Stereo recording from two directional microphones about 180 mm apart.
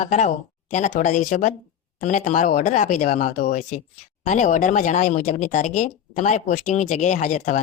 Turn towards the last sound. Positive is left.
turn(degrees=40)  # may be behind; listen again after turning